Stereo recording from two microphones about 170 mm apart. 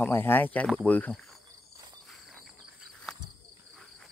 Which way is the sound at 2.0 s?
Centre (ahead or behind).